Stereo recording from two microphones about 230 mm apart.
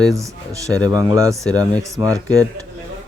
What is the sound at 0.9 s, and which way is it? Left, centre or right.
Speech, centre.